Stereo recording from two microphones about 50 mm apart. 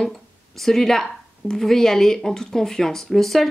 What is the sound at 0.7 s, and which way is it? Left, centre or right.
Speech, centre.